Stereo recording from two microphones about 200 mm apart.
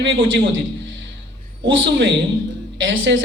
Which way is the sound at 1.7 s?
65° right (ahead or behind).